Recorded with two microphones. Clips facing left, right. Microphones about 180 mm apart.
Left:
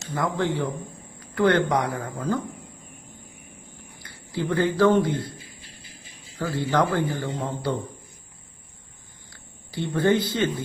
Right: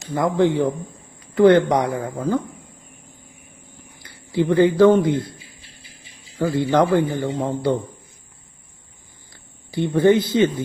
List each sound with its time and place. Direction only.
0.1 s speech: 20° right (ahead or behind)
4.0 s speech: 20° right (ahead or behind)
6.4 s a man's voice: 20° right (ahead or behind)
9.7 s speech: 15° right (ahead or behind)